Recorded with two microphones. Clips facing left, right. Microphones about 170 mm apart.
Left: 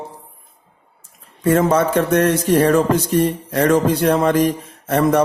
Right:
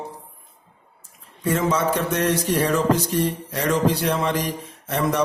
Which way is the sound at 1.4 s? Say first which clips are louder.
Left 6 dB; 55° left (ahead or behind).